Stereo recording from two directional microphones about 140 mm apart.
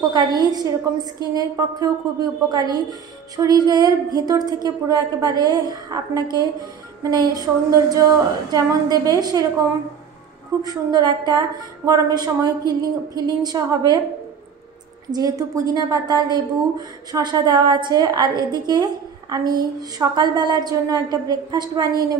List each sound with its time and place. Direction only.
0.1 s a woman's voice: 30° right (ahead or behind)
15.0 s a woman's voice: 25° right (ahead or behind)